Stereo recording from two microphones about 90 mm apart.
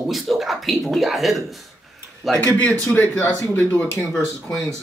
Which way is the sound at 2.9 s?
10° left (ahead or behind).